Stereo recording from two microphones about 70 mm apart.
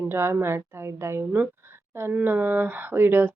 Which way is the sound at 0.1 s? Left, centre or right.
Right.